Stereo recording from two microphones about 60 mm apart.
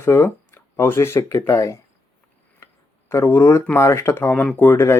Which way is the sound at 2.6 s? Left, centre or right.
Left.